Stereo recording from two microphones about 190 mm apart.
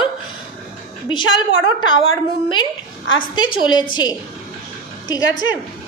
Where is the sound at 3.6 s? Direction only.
25° left (ahead or behind).